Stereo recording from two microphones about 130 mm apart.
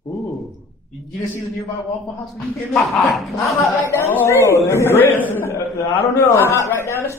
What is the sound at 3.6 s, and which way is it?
A man's voice, 20° left (ahead or behind).